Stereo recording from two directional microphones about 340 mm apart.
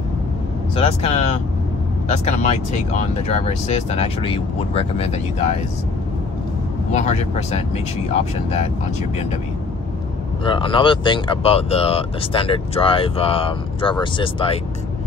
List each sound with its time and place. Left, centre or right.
0.7 s speech: centre
2.4 s speech: centre
6.9 s speech: left
10.4 s speech: centre